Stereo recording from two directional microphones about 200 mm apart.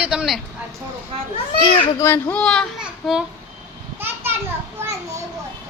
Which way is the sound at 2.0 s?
10° left (ahead or behind).